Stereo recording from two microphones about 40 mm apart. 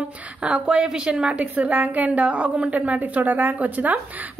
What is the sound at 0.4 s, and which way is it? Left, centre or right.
Speech, right.